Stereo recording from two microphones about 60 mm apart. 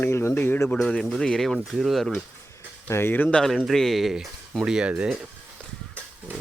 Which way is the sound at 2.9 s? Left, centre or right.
Left.